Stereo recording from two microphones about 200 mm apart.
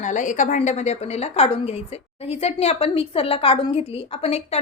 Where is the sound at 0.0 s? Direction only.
40° left (ahead or behind).